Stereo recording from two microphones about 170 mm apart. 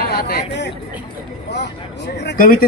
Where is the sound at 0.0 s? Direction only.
70° left (ahead or behind); by 2.3 s 85° left.